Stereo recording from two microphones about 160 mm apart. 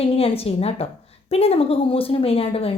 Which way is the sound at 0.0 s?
35° left (ahead or behind).